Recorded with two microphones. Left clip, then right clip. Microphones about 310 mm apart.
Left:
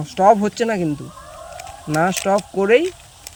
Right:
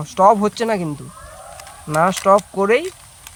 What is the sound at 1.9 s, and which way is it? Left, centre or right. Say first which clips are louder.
Speech: right 4 dB; right.